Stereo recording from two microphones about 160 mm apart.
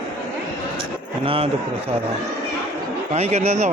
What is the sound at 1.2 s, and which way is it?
Speech, 35° right (ahead or behind).